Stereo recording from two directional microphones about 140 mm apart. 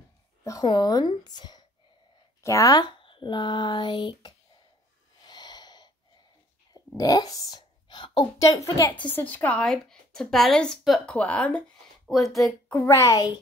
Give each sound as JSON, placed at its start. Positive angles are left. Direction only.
{"t": 0.4, "sound": "a woman's voice", "side_deg": 25}
{"t": 5.2, "sound": "gasp", "side_deg": 30}
{"t": 7.0, "sound": "a woman's voice", "side_deg": 25}
{"t": 8.9, "sound": "a woman's voice", "side_deg": 10}
{"t": 12.6, "sound": "a woman's voice", "side_deg": 15}